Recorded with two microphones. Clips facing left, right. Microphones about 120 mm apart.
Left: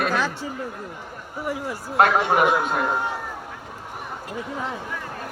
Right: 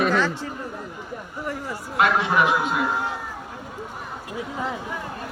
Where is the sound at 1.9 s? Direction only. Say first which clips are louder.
Left 2 dB; 50° left (ahead or behind).